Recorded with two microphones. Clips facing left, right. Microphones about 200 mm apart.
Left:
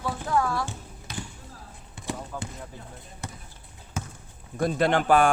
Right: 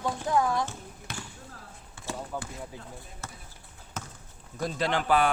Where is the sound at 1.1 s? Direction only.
55° right (ahead or behind).